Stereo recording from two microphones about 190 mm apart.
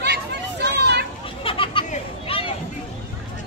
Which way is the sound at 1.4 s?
30° left (ahead or behind).